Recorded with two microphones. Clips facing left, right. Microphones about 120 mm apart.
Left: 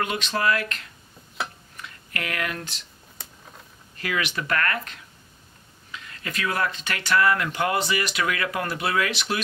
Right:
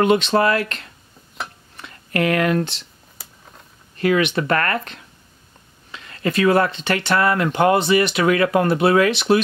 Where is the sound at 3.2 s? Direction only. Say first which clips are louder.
Even; 5° right (ahead or behind).